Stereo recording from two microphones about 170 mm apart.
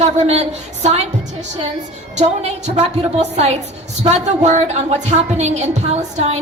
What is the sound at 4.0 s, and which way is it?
A woman's voice, 40° right (ahead or behind).